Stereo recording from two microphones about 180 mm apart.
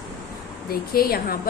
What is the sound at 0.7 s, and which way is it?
Speech, 55° left (ahead or behind).